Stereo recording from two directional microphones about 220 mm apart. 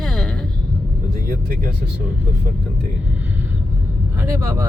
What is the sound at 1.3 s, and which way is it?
Speech, 40° right (ahead or behind).